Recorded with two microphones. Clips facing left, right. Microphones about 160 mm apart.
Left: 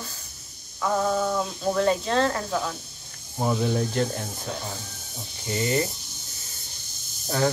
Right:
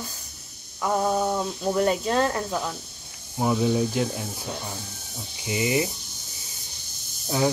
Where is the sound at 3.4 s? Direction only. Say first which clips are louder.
Right 2 dB; 5° right (ahead or behind).